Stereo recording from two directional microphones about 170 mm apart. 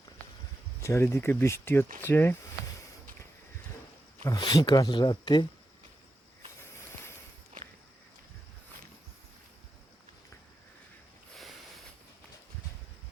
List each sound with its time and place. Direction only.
0.8 s speech: 15° left (ahead or behind)
4.2 s speech: 25° left (ahead or behind)